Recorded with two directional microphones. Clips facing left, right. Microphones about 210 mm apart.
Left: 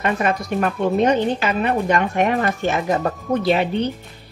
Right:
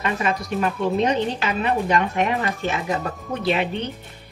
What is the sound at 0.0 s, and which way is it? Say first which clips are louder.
Speech: left 3 dB; 55° left (ahead or behind).